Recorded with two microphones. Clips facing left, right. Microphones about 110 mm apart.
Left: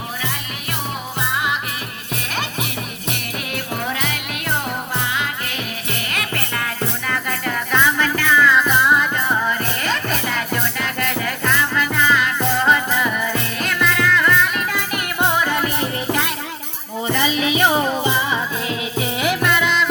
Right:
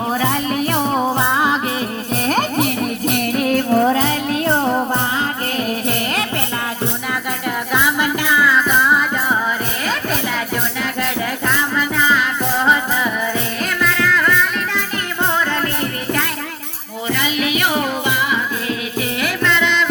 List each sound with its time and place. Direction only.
0.2 s music: 35° right (ahead or behind)
7.1 s music: 10° right (ahead or behind)
15.2 s music: 10° left (ahead or behind)
17.1 s music: 30° left (ahead or behind); by 19.8 s 5° left (ahead or behind)